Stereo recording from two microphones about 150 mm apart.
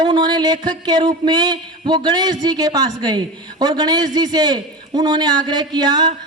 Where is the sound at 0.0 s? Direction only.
30° right (ahead or behind).